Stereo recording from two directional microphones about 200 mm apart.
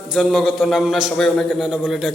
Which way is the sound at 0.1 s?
Centre (ahead or behind).